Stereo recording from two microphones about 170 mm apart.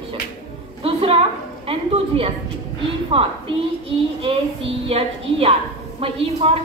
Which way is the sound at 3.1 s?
35° right (ahead or behind).